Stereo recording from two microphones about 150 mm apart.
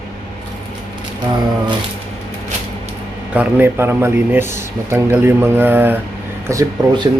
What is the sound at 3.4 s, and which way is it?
Speech, 15° right (ahead or behind).